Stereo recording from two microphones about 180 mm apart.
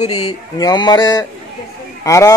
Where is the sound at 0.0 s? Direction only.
30° left (ahead or behind).